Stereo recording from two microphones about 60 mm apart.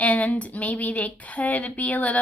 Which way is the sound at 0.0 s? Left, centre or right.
Left.